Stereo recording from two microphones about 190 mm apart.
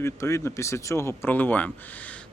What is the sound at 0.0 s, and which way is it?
Speech, 15° left (ahead or behind).